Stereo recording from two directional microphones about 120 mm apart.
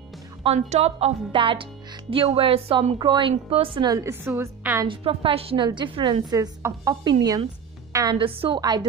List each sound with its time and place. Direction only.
0.6 s a woman's voice: 65° right (ahead or behind)
1.3 s a woman's voice: 45° right (ahead or behind)
3.0 s a woman's voice: 40° right (ahead or behind)
3.9 s chopping: 20° right (ahead or behind)
4.8 s a woman's voice: 45° right (ahead or behind)
6.3 s chopping: 30° right (ahead or behind)
7.9 s a woman's voice: 30° right (ahead or behind)
8.2 s a woman's voice: 50° right (ahead or behind)
8.5 s a woman's voice: 35° right (ahead or behind)